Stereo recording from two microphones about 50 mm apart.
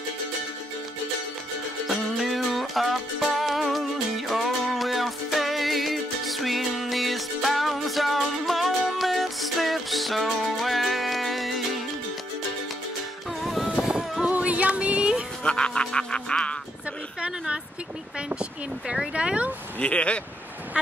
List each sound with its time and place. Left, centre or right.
1.9 s music: centre
13.4 s music: centre
14.2 s music: right
15.4 s music: centre
18.3 s speech: right
19.8 s music: left
20.7 s speech: centre